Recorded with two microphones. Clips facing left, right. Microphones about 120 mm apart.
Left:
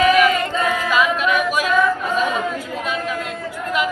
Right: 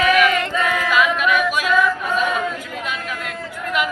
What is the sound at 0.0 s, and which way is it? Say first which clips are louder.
Singing: left 2 dB; 35° left (ahead or behind).